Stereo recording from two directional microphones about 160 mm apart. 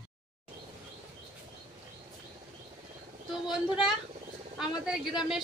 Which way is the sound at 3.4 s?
Centre (ahead or behind).